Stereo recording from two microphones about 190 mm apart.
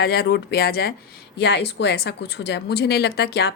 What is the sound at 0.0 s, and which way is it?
Speech, 55° left (ahead or behind).